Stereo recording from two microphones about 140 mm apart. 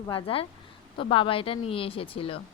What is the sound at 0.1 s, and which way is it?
A woman's voice, 40° left (ahead or behind).